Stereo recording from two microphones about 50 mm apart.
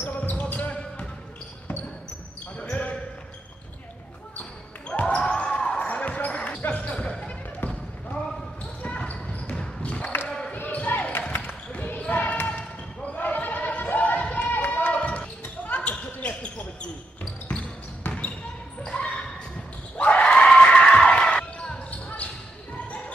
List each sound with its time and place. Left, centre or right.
0.3 s basketball bounce: left
2.5 s basketball bounce: left
4.4 s basketball bounce: left
5.9 s basketball bounce: left
7.6 s basketball bounce: left
8.8 s basketball bounce: left
10.2 s basketball bounce: centre
10.5 s basketball bounce: left
13.2 s a sound: left
14.3 s basketball bounce: left
17.6 s basketball bounce: left